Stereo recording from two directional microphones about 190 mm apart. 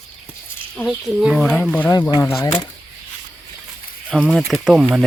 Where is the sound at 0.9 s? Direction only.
Centre (ahead or behind).